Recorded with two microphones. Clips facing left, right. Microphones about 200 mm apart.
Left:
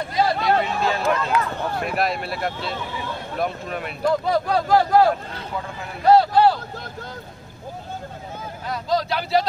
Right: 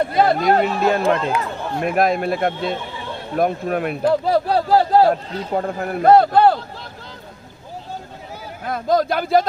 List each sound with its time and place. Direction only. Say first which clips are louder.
0.0 s a man's voice: right 5 dB; 55° right (ahead or behind)
1.0 s speech: right 3 dB; 30° right (ahead or behind)
1.9 s a man's voice: right 10 dB; 45° right (ahead or behind)
4.1 s speech: right 2 dB; 30° right (ahead or behind)
5.5 s a man's voice: right 11 dB; 50° right (ahead or behind)
8.6 s a man's voice: right 5 dB; 50° right (ahead or behind)